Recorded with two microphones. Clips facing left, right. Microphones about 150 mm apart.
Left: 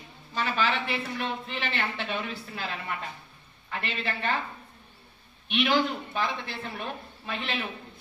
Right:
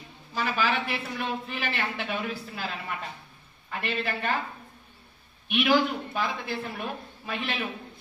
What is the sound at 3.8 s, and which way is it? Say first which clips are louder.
Speech: right 2 dB; 10° right (ahead or behind).